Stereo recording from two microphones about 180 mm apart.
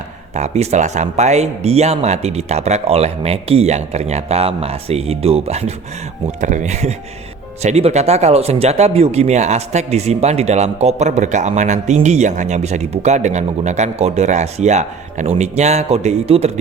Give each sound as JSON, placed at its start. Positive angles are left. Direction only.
{"t": 0.3, "sound": "speech", "side_deg": -40}